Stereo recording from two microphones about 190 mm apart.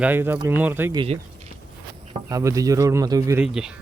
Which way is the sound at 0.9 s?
30° right (ahead or behind).